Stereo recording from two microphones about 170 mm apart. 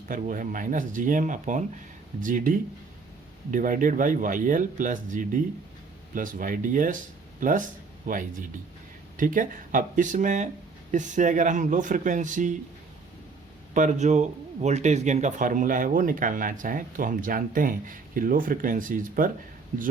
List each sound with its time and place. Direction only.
0.1 s speech: 55° right (ahead or behind)
13.7 s speech: 45° right (ahead or behind)